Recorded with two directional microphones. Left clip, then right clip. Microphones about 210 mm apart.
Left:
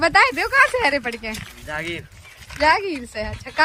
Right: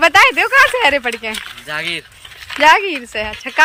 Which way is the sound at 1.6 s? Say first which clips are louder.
Right 6 dB; 15° left (ahead or behind).